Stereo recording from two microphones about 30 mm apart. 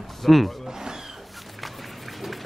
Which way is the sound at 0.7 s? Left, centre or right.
Centre.